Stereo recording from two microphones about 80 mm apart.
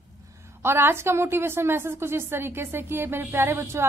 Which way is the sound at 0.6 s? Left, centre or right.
Right.